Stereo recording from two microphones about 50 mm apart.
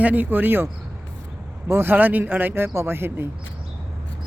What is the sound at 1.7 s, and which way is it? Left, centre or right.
Speech, right.